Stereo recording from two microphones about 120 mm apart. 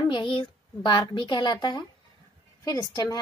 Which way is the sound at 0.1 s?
45° left (ahead or behind).